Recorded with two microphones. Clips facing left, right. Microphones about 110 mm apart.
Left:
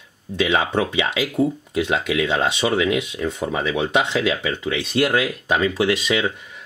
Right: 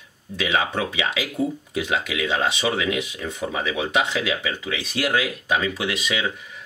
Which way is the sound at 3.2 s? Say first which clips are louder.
Left 4 dB; 35° left (ahead or behind).